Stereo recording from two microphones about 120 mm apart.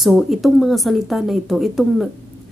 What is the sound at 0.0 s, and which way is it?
A woman's voice, centre (ahead or behind).